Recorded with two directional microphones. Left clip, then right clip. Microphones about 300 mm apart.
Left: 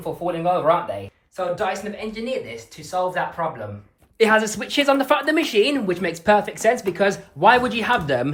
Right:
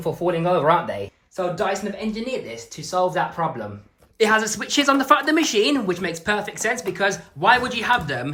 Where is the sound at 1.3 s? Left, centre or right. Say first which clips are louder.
Even; centre.